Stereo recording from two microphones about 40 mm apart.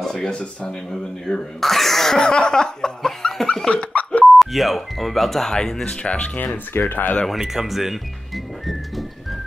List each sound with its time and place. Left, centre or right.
0.0 s a sound: centre
0.3 s speech: left
1.6 s cough: centre
3.6 s dog: left
4.4 s speech: centre
6.0 s speech: left
6.3 s speech: left
7.2 s speech: centre